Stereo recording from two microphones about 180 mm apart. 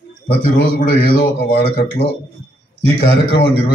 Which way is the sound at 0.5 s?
60° left (ahead or behind).